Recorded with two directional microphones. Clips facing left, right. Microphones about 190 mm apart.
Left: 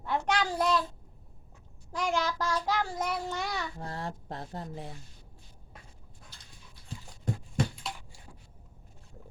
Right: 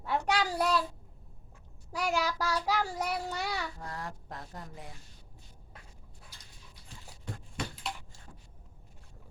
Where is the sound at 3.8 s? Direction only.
25° left (ahead or behind).